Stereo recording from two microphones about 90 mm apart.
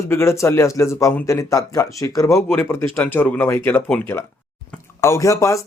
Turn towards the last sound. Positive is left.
turn(degrees=35)  # may be behind; listen again after turning